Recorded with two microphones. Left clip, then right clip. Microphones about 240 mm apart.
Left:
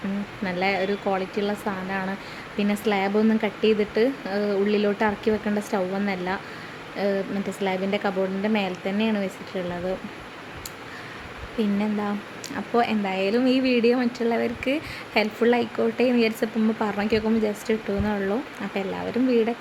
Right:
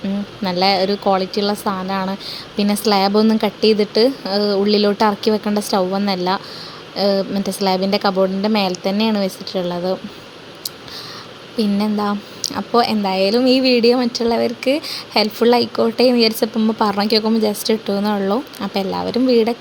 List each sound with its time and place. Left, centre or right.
0.4 s a woman's voice: centre
11.8 s speech: centre